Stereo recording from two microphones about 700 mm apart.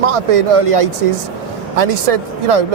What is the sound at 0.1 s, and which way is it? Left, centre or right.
Speech, right.